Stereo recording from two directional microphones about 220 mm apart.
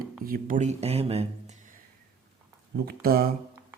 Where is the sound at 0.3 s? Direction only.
35° right (ahead or behind).